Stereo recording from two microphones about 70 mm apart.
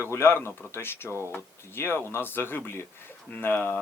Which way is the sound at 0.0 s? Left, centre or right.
Left.